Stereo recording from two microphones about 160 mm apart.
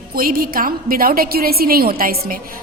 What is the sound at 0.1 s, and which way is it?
A woman's voice, 65° right (ahead or behind).